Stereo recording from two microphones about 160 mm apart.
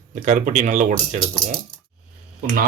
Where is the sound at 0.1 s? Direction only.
45° right (ahead or behind).